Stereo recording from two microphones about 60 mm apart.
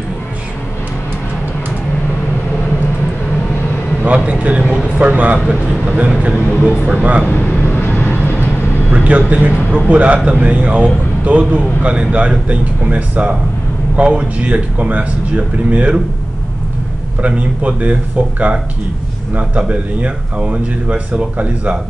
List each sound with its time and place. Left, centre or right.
4.0 s speech: right
7.2 s speech: left
7.6 s vehicle: left
8.9 s a sound: right
9.3 s speech: right
17.2 s speech: right
19.7 s speech: right